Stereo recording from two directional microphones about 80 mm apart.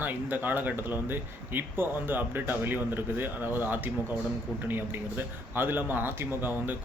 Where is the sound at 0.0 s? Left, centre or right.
Right.